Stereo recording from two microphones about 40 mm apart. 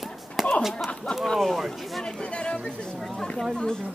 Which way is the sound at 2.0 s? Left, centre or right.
Left.